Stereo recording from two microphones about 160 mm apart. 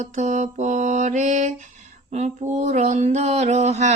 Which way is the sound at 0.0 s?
50° right (ahead or behind).